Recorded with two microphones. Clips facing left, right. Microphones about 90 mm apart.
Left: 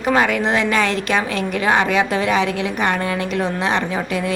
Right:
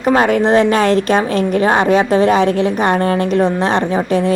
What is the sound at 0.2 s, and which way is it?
A woman's voice, 40° right (ahead or behind).